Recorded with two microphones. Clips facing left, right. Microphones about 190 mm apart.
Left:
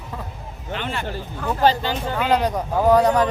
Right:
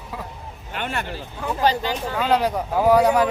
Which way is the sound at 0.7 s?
50° right (ahead or behind).